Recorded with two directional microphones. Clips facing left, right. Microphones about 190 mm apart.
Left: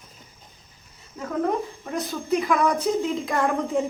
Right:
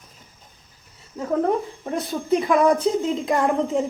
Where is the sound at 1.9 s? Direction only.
25° right (ahead or behind).